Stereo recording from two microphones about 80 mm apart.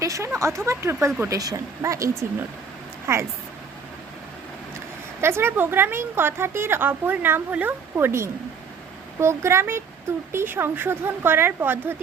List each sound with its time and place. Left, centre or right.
0.0 s speech: right
1.3 s speech: right
3.1 s speech: right
5.2 s a woman's voice: right